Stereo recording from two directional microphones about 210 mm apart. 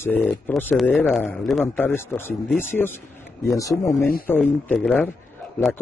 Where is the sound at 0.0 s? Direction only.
5° left (ahead or behind).